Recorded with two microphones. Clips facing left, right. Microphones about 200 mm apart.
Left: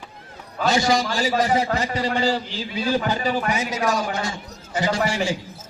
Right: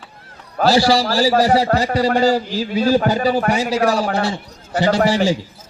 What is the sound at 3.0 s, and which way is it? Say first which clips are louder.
Speech: right 6 dB; 50° right (ahead or behind).